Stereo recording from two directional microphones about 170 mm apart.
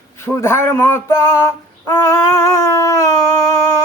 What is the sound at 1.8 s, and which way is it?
Howl, 20° left (ahead or behind).